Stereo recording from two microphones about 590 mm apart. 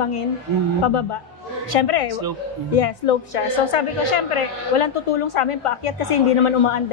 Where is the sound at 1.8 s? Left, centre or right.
Left.